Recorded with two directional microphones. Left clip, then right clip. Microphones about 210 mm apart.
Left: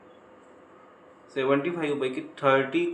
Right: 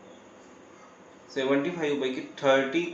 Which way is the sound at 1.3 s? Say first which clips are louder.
Left 2 dB; 20° left (ahead or behind).